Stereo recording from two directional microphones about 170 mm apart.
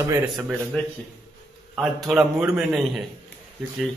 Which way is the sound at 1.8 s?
Centre (ahead or behind).